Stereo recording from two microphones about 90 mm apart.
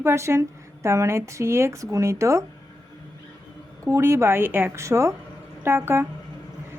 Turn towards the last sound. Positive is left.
turn(degrees=-25)  # may be behind; listen again after turning